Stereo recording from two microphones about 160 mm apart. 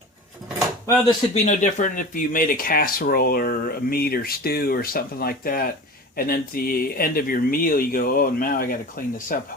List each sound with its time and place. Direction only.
1.0 s speech: 45° left (ahead or behind)